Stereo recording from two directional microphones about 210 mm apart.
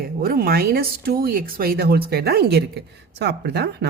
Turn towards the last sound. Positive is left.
turn(degrees=-50)  # may be behind; listen again after turning